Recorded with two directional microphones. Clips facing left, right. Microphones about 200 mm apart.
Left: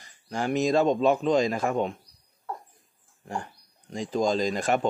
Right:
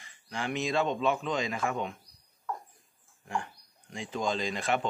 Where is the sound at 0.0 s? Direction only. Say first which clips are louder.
Left 6 dB; 40° left (ahead or behind).